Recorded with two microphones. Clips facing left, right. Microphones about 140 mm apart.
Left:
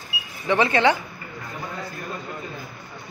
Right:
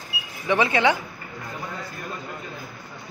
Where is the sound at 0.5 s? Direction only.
5° right (ahead or behind).